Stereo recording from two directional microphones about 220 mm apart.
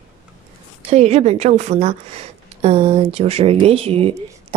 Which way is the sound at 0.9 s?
30° right (ahead or behind).